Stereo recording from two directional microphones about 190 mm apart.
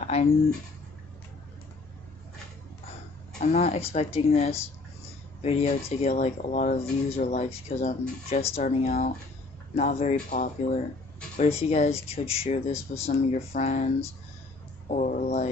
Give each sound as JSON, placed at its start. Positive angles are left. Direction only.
{"t": 0.1, "sound": "speech", "side_deg": 35}
{"t": 3.3, "sound": "speech", "side_deg": 35}